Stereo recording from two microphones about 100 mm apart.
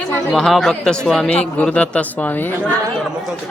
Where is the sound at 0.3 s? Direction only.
5° left (ahead or behind); by 2.7 s 20° left (ahead or behind).